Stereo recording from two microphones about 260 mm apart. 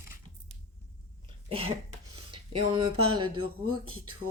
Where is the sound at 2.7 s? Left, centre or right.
Centre.